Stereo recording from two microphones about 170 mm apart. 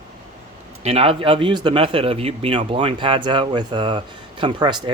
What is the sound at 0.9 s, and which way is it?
Speech, 35° right (ahead or behind).